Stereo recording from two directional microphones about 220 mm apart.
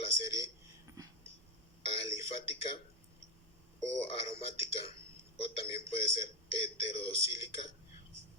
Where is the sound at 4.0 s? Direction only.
25° left (ahead or behind).